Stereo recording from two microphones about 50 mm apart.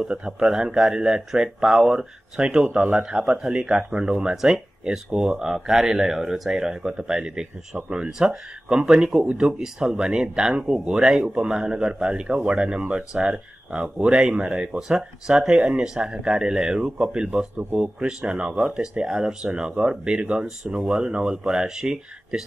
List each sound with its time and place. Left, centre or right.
0.1 s speech: centre
9.4 s speech: centre
14.8 s speech: centre